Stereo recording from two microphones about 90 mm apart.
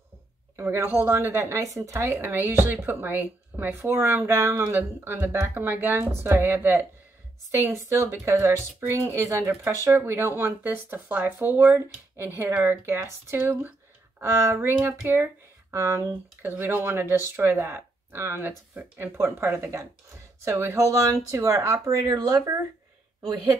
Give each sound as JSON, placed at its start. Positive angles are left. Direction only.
{"t": 0.6, "sound": "speech", "side_deg": -25}
{"t": 7.5, "sound": "speech", "side_deg": -35}